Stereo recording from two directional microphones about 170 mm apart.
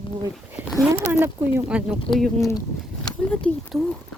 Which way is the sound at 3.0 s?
5° left (ahead or behind).